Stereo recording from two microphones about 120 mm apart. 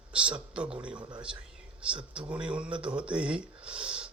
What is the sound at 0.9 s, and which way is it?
Speech, 40° right (ahead or behind).